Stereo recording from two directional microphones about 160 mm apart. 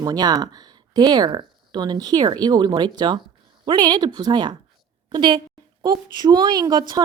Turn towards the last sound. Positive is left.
turn(degrees=-25)  # may be behind; listen again after turning